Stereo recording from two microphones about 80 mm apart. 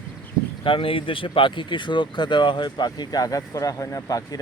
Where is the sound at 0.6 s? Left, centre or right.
Left.